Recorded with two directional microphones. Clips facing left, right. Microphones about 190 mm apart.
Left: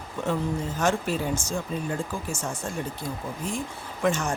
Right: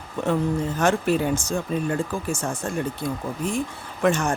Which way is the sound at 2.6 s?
60° right (ahead or behind).